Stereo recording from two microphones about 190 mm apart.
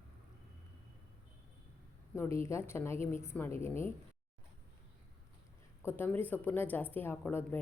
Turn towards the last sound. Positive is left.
turn(degrees=10)  # may be behind; listen again after turning